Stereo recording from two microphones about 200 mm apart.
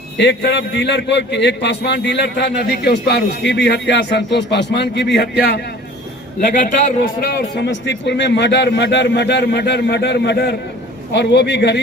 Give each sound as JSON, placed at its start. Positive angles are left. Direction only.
{"t": 0.2, "sound": "a man's voice", "side_deg": 60}
{"t": 6.6, "sound": "a man's voice", "side_deg": 40}
{"t": 7.5, "sound": "a man's voice", "side_deg": 60}